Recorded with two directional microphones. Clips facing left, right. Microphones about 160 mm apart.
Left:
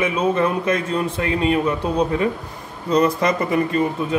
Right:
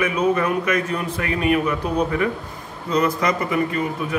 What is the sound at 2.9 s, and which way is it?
Speech, 30° left (ahead or behind).